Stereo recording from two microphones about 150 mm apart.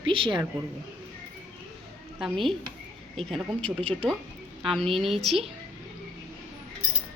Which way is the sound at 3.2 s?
Centre (ahead or behind).